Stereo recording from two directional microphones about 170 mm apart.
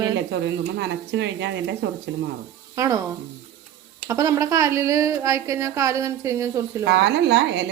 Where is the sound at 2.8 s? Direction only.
20° right (ahead or behind).